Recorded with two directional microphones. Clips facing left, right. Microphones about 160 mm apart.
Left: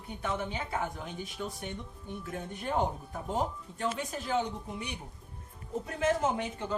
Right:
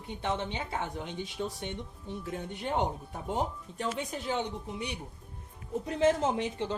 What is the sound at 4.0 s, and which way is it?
Speech, 20° right (ahead or behind).